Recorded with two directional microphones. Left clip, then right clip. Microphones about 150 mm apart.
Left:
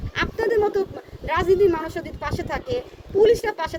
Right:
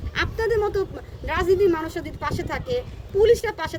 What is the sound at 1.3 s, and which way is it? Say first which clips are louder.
Speech: left 1 dB; 30° right (ahead or behind).